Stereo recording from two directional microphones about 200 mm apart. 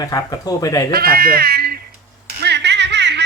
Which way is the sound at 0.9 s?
50° right (ahead or behind).